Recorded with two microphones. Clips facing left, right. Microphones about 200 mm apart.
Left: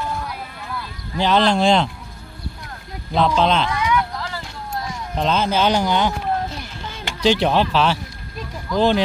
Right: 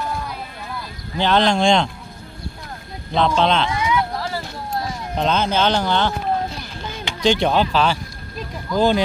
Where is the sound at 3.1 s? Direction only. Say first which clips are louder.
Even; 5° left (ahead or behind).